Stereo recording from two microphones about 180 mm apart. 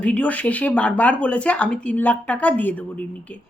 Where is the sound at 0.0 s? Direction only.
5° left (ahead or behind).